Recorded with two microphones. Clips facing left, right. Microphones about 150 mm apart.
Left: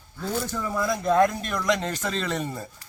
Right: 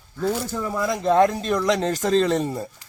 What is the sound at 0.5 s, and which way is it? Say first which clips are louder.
A man's voice: right 2 dB; 25° right (ahead or behind).